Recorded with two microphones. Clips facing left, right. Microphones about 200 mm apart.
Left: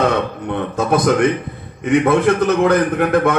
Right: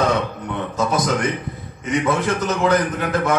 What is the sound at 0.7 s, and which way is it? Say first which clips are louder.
A man's voice: left 6 dB; 60° left (ahead or behind).